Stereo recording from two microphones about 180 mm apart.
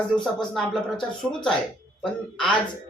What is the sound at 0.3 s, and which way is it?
Speech, centre (ahead or behind).